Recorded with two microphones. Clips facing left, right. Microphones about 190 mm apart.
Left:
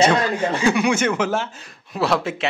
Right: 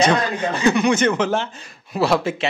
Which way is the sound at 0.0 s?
10° left (ahead or behind).